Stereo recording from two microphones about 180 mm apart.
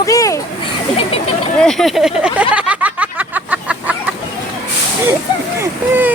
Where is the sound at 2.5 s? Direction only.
5° right (ahead or behind).